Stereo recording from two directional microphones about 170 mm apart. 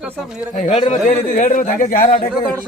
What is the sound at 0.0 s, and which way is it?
Speech, 5° right (ahead or behind).